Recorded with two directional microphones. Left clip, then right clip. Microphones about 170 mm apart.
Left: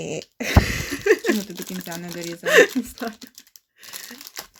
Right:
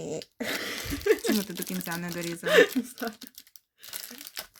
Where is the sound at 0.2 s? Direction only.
30° left (ahead or behind).